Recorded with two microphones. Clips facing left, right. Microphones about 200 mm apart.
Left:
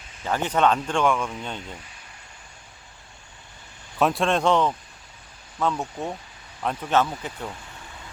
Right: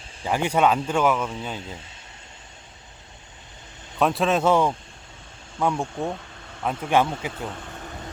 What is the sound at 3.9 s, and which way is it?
Speech, centre (ahead or behind).